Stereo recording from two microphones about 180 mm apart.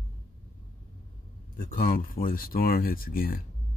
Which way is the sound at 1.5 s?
55° left (ahead or behind).